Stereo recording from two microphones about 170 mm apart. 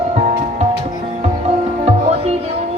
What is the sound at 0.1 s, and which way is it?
Music, 40° right (ahead or behind).